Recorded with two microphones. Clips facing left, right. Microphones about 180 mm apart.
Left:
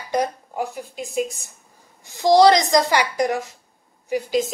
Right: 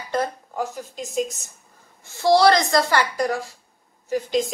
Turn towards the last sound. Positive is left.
turn(degrees=5)  # may be behind; listen again after turning